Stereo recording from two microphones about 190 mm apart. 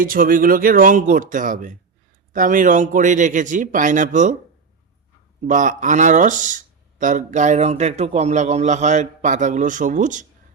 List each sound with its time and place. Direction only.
0.0 s a man's voice: 45° right (ahead or behind)
5.5 s a man's voice: 40° right (ahead or behind)